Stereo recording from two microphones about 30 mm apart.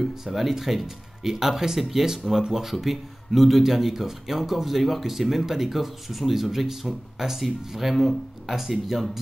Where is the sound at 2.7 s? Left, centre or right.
Centre.